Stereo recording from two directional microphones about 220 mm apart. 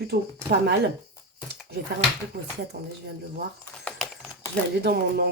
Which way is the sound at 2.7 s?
45° right (ahead or behind).